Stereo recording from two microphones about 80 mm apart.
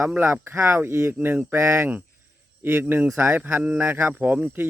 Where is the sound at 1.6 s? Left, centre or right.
Right.